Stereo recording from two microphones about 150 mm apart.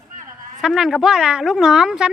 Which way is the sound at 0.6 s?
Centre (ahead or behind).